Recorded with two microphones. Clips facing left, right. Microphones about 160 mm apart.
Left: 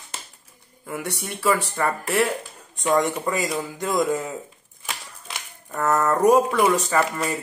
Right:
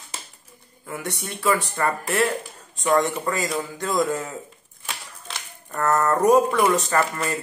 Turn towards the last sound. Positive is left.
turn(degrees=10)  # may be behind; listen again after turning